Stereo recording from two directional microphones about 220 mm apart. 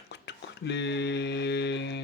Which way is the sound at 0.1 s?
50° left (ahead or behind).